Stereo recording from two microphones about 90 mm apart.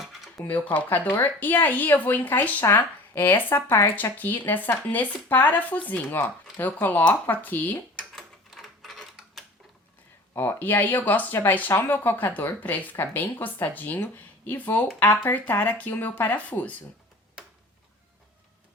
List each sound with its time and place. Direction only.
0.4 s speech: 15° left (ahead or behind)
8.1 s mechanisms: centre (ahead or behind)
10.3 s speech: 20° left (ahead or behind)